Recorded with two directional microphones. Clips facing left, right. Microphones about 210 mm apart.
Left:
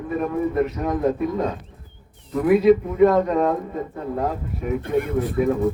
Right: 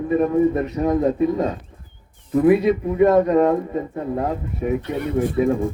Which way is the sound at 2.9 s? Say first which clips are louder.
Right 2 dB; 20° right (ahead or behind).